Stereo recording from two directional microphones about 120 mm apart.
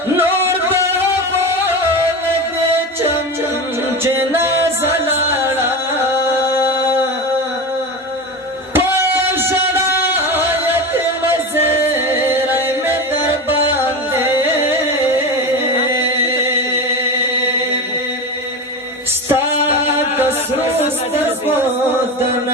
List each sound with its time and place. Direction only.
0.1 s music: 20° right (ahead or behind)
4.0 s music: 20° right (ahead or behind)
8.7 s music: 20° right (ahead or behind)
11.8 s music: 20° right (ahead or behind)
14.1 s music: 20° right (ahead or behind)
15.9 s chant: 20° right (ahead or behind)
19.3 s music: 20° right (ahead or behind)